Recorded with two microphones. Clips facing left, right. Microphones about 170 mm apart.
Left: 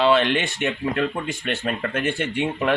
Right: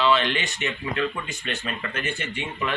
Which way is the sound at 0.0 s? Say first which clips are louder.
Left 4 dB; 55° left (ahead or behind).